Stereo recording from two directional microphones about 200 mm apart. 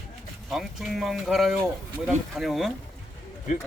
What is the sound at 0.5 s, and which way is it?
Speech, centre (ahead or behind).